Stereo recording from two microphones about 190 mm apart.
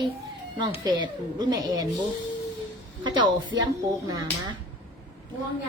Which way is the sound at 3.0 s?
25° right (ahead or behind).